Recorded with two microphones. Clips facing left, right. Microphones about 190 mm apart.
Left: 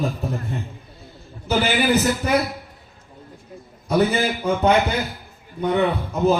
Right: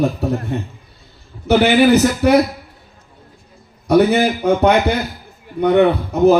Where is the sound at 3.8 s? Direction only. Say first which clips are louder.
Right 7 dB; 70° right (ahead or behind).